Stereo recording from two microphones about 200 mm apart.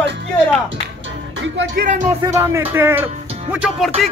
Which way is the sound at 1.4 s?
60° right (ahead or behind).